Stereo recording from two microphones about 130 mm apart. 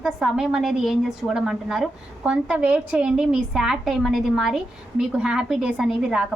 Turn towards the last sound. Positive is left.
turn(degrees=-5)  # may be behind; listen again after turning